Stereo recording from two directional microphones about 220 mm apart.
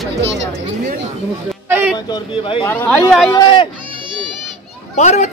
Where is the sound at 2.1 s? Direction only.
20° left (ahead or behind).